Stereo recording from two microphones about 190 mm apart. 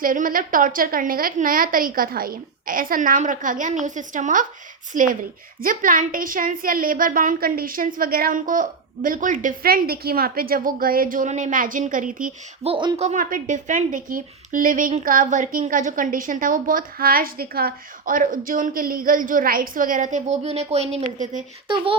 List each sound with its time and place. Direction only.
0.0 s a woman's voice: 45° right (ahead or behind)
12.6 s speech: 25° right (ahead or behind)
13.1 s a woman's voice: 45° right (ahead or behind)